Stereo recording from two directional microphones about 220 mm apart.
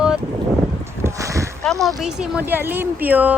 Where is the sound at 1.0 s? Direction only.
15° right (ahead or behind).